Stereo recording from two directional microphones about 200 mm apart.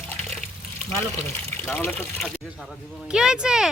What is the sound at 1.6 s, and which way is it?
Speech, 10° left (ahead or behind).